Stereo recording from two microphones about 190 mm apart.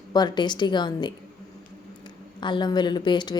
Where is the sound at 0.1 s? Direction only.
20° left (ahead or behind).